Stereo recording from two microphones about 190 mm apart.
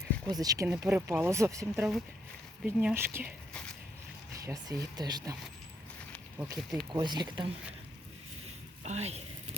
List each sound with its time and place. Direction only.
0.3 s speech: 20° right (ahead or behind)
1.7 s speech: centre (ahead or behind)
2.6 s speech: 10° right (ahead or behind)
3.5 s a sound: 5° left (ahead or behind)
4.4 s speech: 20° right (ahead or behind)
6.4 s speech: 10° right (ahead or behind)
6.9 s speech: 20° right (ahead or behind)
8.4 s a sound: 35° right (ahead or behind)